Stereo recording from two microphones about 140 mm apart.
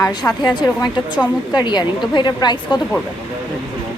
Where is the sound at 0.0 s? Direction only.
30° left (ahead or behind).